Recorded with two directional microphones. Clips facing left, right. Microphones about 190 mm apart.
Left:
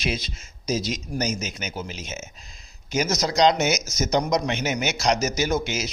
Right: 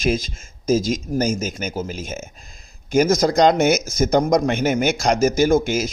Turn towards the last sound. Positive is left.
turn(degrees=-50)  # may be behind; listen again after turning